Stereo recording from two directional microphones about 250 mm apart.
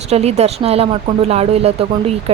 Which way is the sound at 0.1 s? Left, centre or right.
Right.